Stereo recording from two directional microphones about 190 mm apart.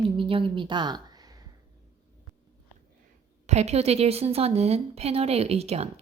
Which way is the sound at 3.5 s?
35° right (ahead or behind).